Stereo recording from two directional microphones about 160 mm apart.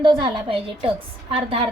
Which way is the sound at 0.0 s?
30° right (ahead or behind).